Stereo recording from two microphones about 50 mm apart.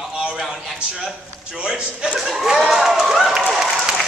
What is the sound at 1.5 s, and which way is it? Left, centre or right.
Chuckle, right.